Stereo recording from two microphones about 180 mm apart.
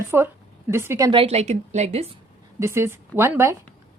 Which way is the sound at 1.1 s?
30° right (ahead or behind).